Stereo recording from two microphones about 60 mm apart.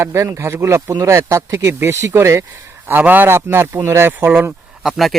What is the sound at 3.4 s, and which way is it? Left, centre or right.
Speech, right.